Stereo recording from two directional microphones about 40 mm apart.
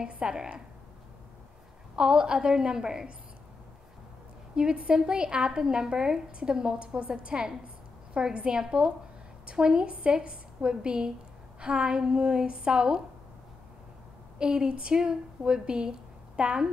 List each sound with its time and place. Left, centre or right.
0.2 s a woman's voice: right
2.0 s a woman's voice: right
4.6 s a woman's voice: right
14.4 s speech: right